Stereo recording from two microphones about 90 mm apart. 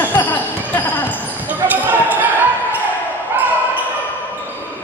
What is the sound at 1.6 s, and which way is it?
Basketball bounce, 20° right (ahead or behind).